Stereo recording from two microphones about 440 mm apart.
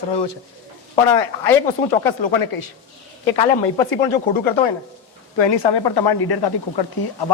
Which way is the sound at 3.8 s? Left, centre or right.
Left.